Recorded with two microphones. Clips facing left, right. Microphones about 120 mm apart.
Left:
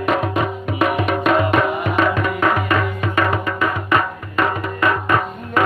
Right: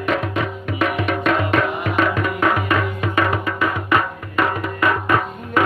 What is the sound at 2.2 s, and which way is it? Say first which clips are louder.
Music: left 1 dB; centre (ahead or behind).